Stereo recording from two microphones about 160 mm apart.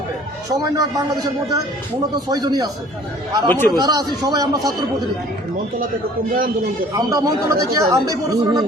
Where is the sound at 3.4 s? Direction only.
15° left (ahead or behind).